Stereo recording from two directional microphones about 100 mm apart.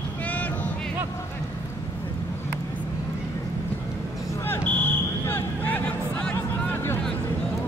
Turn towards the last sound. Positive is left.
turn(degrees=25)  # may be behind; listen again after turning